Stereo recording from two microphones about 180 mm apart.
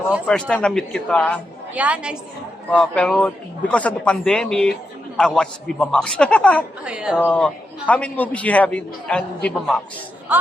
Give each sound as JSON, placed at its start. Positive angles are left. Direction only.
{"t": 0.3, "sound": "a man's voice", "side_deg": 5}
{"t": 1.7, "sound": "a woman's voice", "side_deg": -10}
{"t": 2.6, "sound": "a man's voice", "side_deg": 5}
{"t": 6.8, "sound": "a man's voice", "side_deg": -5}
{"t": 7.2, "sound": "a man's voice", "side_deg": 5}